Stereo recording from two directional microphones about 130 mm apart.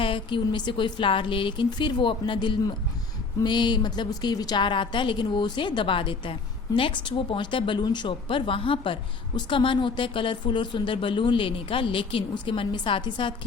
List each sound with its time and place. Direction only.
0.0 s speech: 40° left (ahead or behind)